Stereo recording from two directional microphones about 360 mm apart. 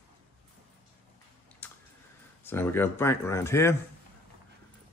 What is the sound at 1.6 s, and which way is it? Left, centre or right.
Typing, centre.